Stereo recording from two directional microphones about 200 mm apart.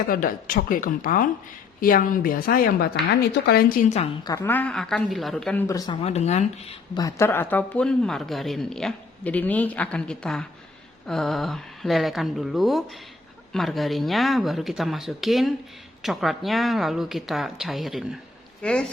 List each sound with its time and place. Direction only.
0.1 s a woman's voice: 45° left (ahead or behind)
4.2 s speech: 15° left (ahead or behind)
5.6 s speech: 20° left (ahead or behind); by 6.7 s 35° left (ahead or behind)
6.9 s speech: 15° left (ahead or behind)